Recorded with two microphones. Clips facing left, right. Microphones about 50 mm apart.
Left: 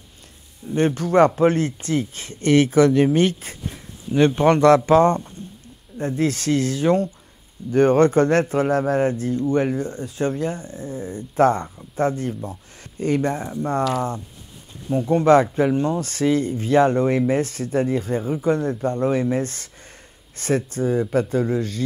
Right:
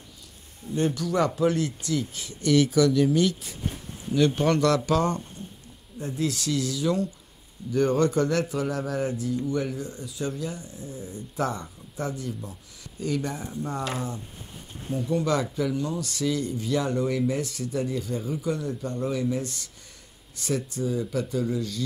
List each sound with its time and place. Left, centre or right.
0.7 s speech: left